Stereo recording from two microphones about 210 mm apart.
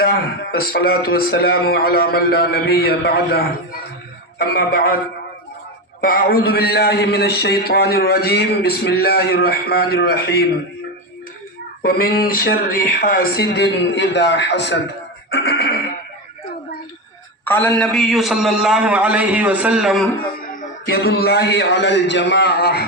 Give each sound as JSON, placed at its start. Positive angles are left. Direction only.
{"t": 0.0, "sound": "a man's voice", "side_deg": 45}
{"t": 6.0, "sound": "a man's voice", "side_deg": 45}
{"t": 11.8, "sound": "a man's voice", "side_deg": 45}
{"t": 17.4, "sound": "a man's voice", "side_deg": 10}
{"t": 20.5, "sound": "a man's voice", "side_deg": 45}